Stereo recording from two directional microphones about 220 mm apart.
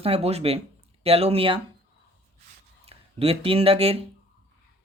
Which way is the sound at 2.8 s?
25° right (ahead or behind).